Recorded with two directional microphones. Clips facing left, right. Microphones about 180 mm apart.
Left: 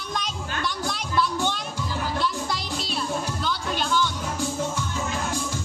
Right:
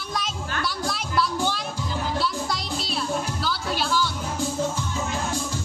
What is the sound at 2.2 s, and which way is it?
Music, centre (ahead or behind).